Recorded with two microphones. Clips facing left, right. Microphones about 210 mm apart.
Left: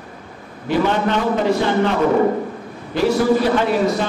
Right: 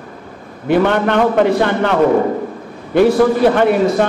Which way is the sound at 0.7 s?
60° right (ahead or behind).